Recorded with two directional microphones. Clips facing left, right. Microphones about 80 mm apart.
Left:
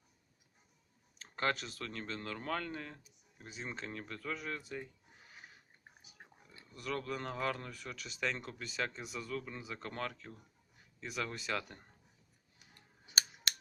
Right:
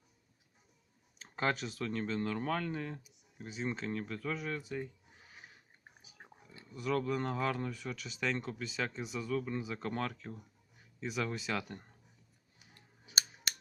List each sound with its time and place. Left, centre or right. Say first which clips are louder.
1.2 s speech: right 2 dB; centre
6.7 s speech: right 6 dB; centre